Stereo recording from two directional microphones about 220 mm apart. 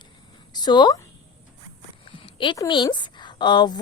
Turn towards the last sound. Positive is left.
turn(degrees=20)  # may be behind; listen again after turning